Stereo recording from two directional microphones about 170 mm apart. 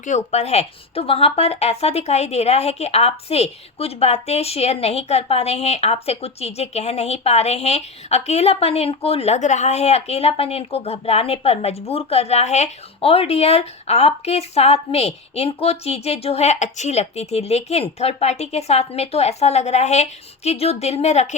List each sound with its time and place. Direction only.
0.0 s a woman's voice: 45° left (ahead or behind)